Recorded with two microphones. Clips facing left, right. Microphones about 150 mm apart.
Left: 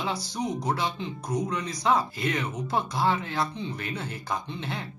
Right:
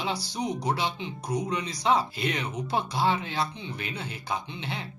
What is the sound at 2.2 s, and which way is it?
Speech, 20° right (ahead or behind).